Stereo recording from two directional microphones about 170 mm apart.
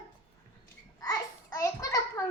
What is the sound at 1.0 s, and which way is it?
A child's voice, 20° left (ahead or behind).